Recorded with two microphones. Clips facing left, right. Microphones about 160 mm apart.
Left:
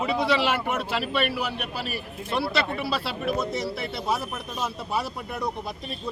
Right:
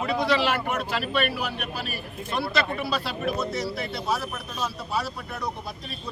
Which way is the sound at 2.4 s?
Centre (ahead or behind).